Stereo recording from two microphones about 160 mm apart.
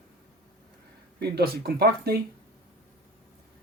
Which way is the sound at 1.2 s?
80° right.